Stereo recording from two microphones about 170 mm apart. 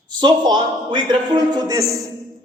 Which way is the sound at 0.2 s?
25° right (ahead or behind).